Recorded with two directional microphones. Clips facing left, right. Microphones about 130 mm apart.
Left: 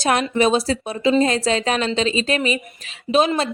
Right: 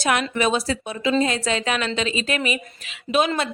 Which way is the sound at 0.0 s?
35° left (ahead or behind).